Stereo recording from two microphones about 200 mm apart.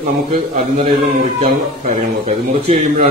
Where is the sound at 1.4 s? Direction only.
30° right (ahead or behind).